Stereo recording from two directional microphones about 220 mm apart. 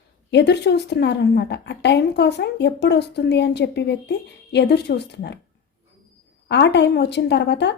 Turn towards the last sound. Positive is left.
turn(degrees=50)  # may be behind; listen again after turning